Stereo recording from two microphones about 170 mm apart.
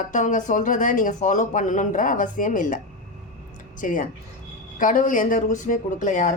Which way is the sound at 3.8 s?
50° left (ahead or behind).